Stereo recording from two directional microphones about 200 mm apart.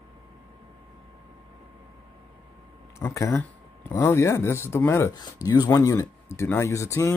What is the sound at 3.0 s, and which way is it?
Speech, 15° left (ahead or behind).